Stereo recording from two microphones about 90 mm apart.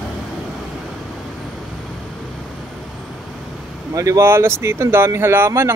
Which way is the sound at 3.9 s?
40° right (ahead or behind).